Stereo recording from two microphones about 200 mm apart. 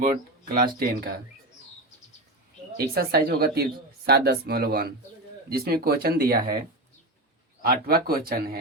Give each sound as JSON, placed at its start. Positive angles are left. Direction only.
{"t": 0.0, "sound": "speech", "side_deg": -45}
{"t": 2.7, "sound": "speech", "side_deg": -50}
{"t": 7.6, "sound": "speech", "side_deg": -50}